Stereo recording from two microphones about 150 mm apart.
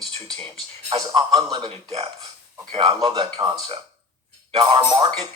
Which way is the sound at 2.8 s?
30° right (ahead or behind).